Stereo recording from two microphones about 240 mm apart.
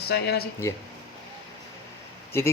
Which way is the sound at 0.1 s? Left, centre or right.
Left.